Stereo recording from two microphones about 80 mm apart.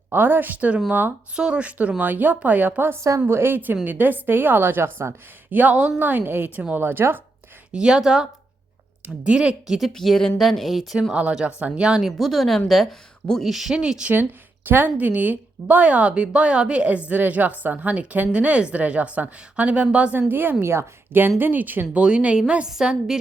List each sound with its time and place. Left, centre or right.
0.1 s a woman's voice: right
7.7 s a woman's voice: centre
11.1 s speech: centre
12.1 s a woman's voice: centre
14.7 s a woman's voice: right; by 23.2 s centre